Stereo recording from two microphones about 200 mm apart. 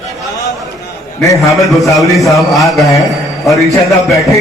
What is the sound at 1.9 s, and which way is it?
A man's voice, centre (ahead or behind).